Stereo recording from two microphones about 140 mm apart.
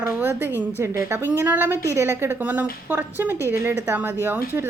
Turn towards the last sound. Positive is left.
turn(degrees=-15)  # may be behind; listen again after turning